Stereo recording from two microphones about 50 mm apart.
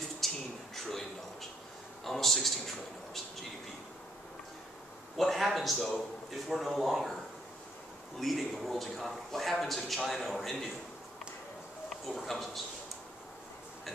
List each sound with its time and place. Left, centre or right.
0.2 s a sound: centre
2.0 s a man's voice: centre
5.1 s a man's voice: centre
8.2 s a man's voice: centre
12.2 s a man's voice: centre